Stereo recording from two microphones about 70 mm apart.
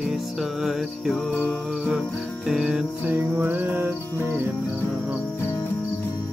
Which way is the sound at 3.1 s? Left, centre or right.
Right.